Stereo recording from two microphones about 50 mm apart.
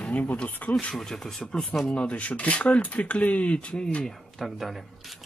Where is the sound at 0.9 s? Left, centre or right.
Centre.